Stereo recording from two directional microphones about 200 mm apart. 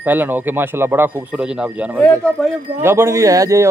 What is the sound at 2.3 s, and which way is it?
Speech, 10° right (ahead or behind).